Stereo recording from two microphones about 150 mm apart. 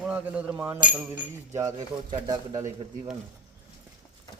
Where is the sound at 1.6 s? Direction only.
25° right (ahead or behind).